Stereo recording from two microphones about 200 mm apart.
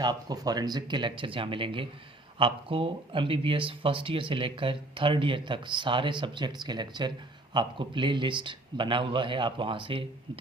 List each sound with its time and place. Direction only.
0.0 s speech: 20° right (ahead or behind)